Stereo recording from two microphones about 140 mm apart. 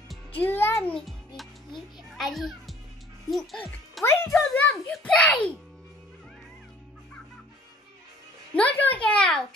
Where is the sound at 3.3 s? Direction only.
Centre (ahead or behind).